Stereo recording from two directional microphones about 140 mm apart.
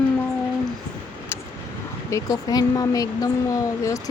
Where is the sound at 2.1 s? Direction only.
25° left (ahead or behind).